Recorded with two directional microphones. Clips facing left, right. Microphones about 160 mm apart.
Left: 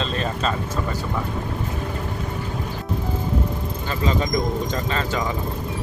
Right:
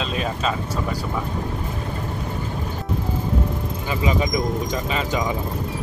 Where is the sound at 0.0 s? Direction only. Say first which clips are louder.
Even; 5° right (ahead or behind).